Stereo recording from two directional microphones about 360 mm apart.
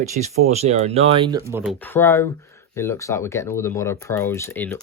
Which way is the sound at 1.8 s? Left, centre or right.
Centre.